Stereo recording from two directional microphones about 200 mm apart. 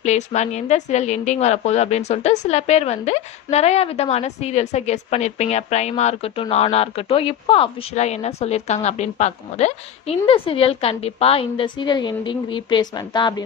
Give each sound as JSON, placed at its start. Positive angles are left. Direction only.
{"t": 0.0, "sound": "a woman's voice", "side_deg": 35}